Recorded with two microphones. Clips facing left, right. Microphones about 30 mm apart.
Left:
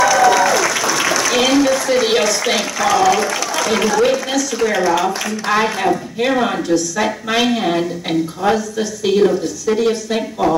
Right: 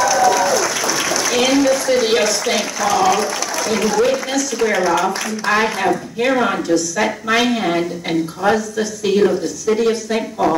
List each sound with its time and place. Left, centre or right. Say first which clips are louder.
0.3 s applause: left 2 dB; left
0.7 s a sound: left 3 dB; centre
2.4 s speech: left 2 dB; centre
3.9 s speech: left 1 dB; centre